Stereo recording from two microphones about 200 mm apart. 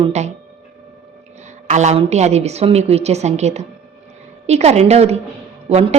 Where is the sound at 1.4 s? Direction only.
35° right (ahead or behind).